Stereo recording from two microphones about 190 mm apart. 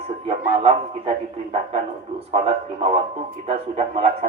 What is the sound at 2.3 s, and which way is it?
Speech, 30° right (ahead or behind).